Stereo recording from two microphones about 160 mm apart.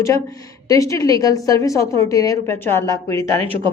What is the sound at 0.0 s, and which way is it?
A woman's voice, 20° left (ahead or behind).